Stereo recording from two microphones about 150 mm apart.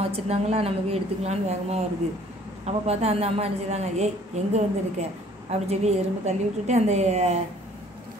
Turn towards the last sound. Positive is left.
turn(degrees=-50)  # may be behind; listen again after turning